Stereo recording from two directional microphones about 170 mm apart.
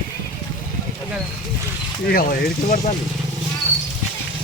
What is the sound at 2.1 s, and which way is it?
Speech, 60° left (ahead or behind).